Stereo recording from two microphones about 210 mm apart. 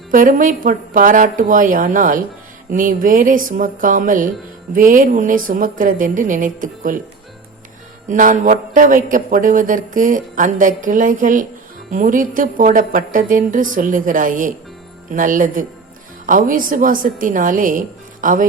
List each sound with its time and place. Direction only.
0.1 s a man's voice: 40° right (ahead or behind)
8.1 s a man's voice: 40° right (ahead or behind)